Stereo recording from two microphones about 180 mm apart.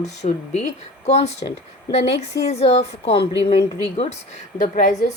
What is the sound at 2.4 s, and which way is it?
Speech, 35° left (ahead or behind).